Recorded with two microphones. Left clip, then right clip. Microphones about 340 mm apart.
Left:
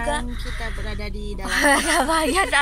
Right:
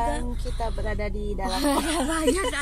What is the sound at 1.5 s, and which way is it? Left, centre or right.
Speech, left.